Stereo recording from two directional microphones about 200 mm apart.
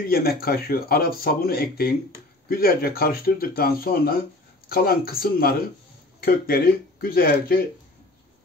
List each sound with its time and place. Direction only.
0.1 s speech: 50° left (ahead or behind)